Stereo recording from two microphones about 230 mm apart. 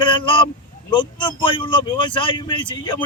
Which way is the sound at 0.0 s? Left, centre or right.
Left.